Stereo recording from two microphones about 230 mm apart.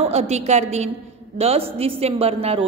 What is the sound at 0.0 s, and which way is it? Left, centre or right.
A man's voice, right.